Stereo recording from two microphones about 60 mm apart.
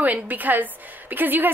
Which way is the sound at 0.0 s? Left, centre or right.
Right.